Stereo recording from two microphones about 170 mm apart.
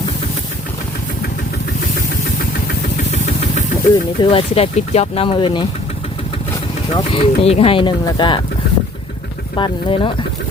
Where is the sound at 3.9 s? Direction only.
35° left (ahead or behind).